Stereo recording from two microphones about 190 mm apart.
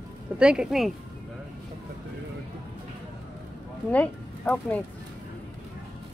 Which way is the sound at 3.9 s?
5° left (ahead or behind).